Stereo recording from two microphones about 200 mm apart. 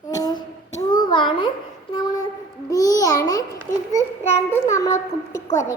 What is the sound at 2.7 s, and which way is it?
A child's voice, 20° left (ahead or behind).